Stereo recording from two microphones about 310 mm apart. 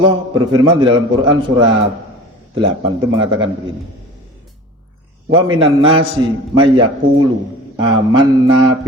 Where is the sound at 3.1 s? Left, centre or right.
Centre.